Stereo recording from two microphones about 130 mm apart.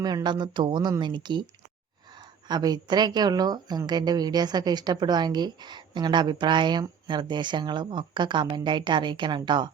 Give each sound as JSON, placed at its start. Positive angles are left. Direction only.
{"t": 0.0, "sound": "a woman's voice", "side_deg": -35}